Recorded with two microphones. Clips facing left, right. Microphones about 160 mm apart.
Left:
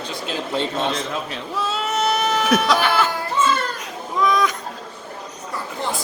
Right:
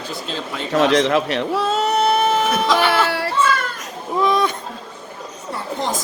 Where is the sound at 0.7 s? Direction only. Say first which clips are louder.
Right 9 dB; 80° right.